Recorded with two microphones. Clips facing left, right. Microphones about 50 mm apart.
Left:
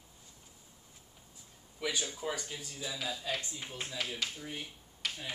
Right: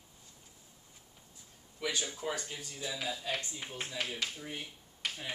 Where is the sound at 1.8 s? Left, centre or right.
Centre.